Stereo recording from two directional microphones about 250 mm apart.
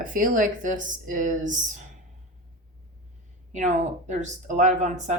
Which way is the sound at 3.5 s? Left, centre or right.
Right.